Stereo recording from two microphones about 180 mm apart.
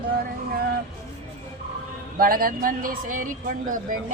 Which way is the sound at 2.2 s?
55° right (ahead or behind).